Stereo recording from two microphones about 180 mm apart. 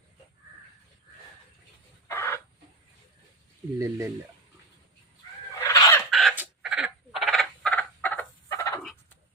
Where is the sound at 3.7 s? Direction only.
15° right (ahead or behind).